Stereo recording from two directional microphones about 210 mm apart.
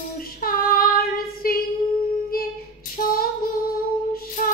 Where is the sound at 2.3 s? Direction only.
45° left (ahead or behind).